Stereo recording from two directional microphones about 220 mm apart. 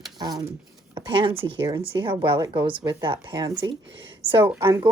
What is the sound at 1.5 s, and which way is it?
A woman's voice, 20° right (ahead or behind).